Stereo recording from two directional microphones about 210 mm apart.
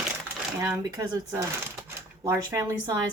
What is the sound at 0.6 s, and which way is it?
Speech, 15° right (ahead or behind).